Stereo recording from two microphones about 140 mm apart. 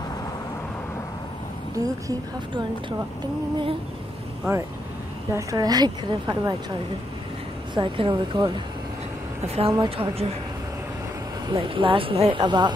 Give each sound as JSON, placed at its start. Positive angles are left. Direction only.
{"t": 1.8, "sound": "a woman's voice", "side_deg": -25}
{"t": 5.3, "sound": "a woman's voice", "side_deg": -25}
{"t": 7.7, "sound": "speech", "side_deg": -35}
{"t": 9.6, "sound": "a woman's voice", "side_deg": -40}
{"t": 11.4, "sound": "speech", "side_deg": -35}